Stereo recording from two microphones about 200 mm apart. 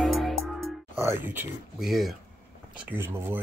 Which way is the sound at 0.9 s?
10° right (ahead or behind).